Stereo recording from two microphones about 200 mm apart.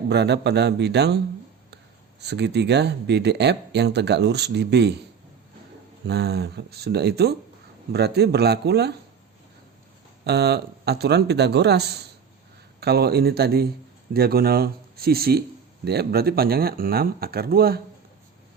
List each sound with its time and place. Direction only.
0.1 s speech: 55° right (ahead or behind)
2.2 s speech: 55° right (ahead or behind)
6.1 s speech: 55° right (ahead or behind)
10.2 s speech: 55° right (ahead or behind)